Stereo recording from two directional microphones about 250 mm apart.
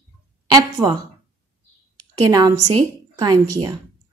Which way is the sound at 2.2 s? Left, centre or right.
Centre.